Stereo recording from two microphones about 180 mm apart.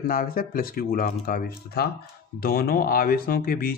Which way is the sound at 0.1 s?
50° left (ahead or behind).